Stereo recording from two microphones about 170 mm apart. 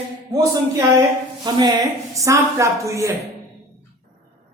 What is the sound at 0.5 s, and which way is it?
A woman's voice, 25° right (ahead or behind).